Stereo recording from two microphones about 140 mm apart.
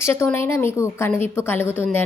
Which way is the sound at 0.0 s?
20° left (ahead or behind).